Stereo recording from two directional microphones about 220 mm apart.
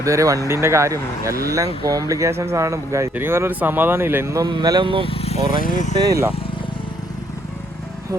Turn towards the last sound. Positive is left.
turn(degrees=-15)  # may be behind; listen again after turning